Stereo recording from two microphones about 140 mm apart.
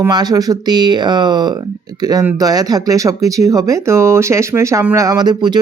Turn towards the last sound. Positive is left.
turn(degrees=-30)  # may be behind; listen again after turning